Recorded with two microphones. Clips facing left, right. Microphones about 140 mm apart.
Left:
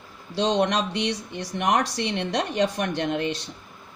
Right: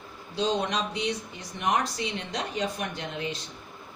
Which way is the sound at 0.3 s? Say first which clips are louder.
Left 5 dB; 80° left.